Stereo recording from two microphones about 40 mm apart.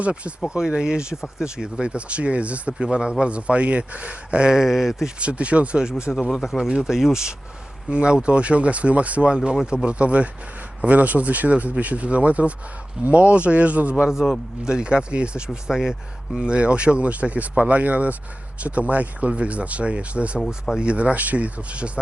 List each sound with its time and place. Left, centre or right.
0.0 s speech: right
0.5 s speech: centre
1.1 s speech: centre
1.8 s speech: right
2.7 s speech: centre
4.5 s speech: centre
5.2 s speech: right
6.1 s speech: centre
6.6 s speech: centre; by 13.9 s right
14.1 s speech: centre; by 15.4 s right
15.6 s speech: centre
16.5 s speech: right